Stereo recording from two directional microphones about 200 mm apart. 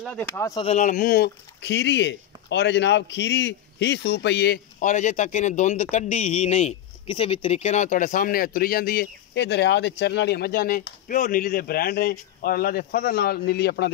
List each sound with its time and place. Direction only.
0.0 s speech: centre (ahead or behind)
0.3 s speech: 15° left (ahead or behind)
0.7 s speech: 35° left (ahead or behind); by 13.9 s 55° left (ahead or behind)